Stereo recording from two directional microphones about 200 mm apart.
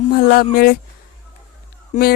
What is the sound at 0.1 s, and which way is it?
Speech, 50° left (ahead or behind).